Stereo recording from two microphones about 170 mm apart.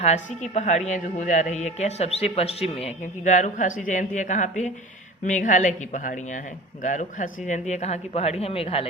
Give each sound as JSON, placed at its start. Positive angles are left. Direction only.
{"t": 0.0, "sound": "a man's voice", "side_deg": 45}